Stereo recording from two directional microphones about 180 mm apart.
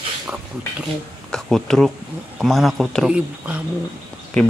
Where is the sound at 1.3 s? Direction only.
Centre (ahead or behind).